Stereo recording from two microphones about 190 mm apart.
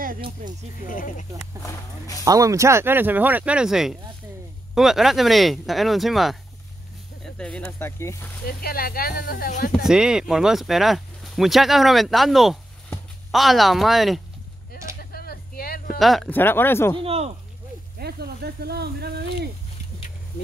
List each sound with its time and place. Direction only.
0.8 s speech: 45° left (ahead or behind)
1.6 s speech: 15° left (ahead or behind)
2.2 s speech: 15° right (ahead or behind); by 6.3 s centre (ahead or behind)
7.3 s speech: 5° left (ahead or behind)
8.5 s speech: 50° left (ahead or behind)
9.8 s speech: 5° right (ahead or behind)
15.0 s a sound: 55° left (ahead or behind)
16.0 s speech: centre (ahead or behind)
17.0 s speech: 30° right (ahead or behind)
17.9 s speech: 55° right (ahead or behind)